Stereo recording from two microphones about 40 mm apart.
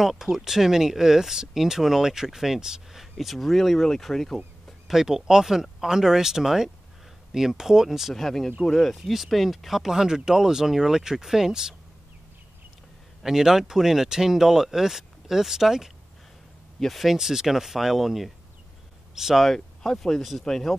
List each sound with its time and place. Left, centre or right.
0.0 s speech: centre
4.8 s speech: centre
8.1 s speech: centre
13.2 s speech: centre
19.8 s speech: centre